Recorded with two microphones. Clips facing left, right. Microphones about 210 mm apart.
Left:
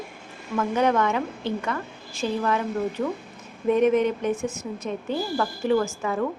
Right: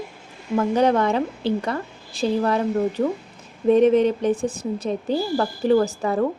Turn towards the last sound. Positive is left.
turn(degrees=-35)  # may be behind; listen again after turning